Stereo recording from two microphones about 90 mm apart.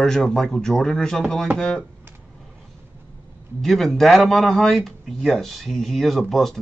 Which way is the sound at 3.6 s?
Centre (ahead or behind).